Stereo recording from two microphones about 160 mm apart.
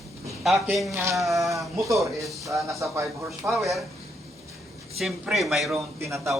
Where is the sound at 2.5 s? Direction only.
20° right (ahead or behind).